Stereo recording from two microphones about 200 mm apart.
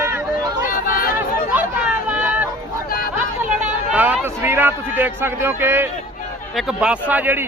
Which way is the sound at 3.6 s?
5° right (ahead or behind).